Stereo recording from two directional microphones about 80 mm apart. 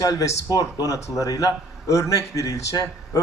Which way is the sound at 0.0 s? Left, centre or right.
Left.